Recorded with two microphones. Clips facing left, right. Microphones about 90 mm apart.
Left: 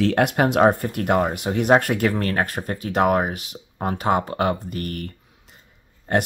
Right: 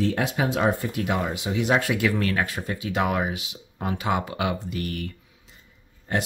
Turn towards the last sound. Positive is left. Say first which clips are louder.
# left 5 dB
turn(degrees=55)  # may be behind; listen again after turning